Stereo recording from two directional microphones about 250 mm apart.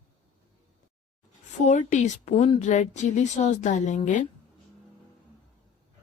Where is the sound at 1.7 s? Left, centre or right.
Left.